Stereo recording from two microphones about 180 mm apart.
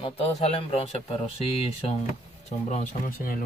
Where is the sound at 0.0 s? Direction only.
30° left (ahead or behind).